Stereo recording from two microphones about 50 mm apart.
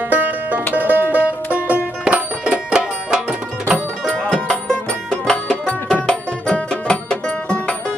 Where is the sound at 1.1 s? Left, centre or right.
Right.